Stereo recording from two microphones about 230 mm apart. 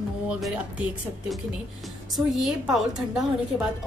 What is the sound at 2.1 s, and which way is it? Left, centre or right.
Speech, centre.